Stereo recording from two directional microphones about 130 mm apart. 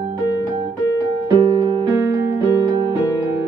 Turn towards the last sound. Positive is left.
turn(degrees=-35)  # may be behind; listen again after turning